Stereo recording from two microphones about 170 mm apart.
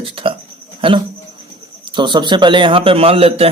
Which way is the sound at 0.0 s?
35° right (ahead or behind).